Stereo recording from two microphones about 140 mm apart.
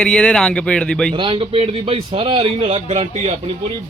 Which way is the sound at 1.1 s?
35° right (ahead or behind).